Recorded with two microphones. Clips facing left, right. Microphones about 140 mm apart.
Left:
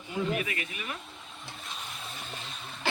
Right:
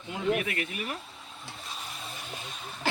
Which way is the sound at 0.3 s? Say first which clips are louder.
Right 2 dB; 60° right (ahead or behind).